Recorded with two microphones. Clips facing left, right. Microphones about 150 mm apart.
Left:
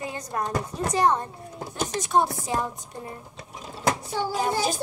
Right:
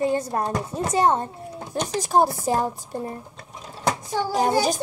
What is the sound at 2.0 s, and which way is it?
Speech, 35° right (ahead or behind).